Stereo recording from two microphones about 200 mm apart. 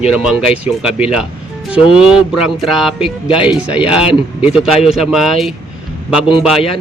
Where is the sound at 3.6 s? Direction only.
5° right (ahead or behind).